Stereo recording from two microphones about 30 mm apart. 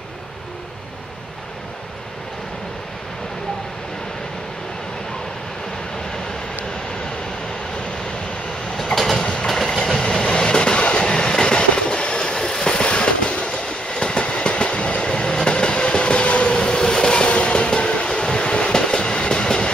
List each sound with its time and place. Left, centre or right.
9.1 s train: left
12.7 s train: left
15.0 s train: left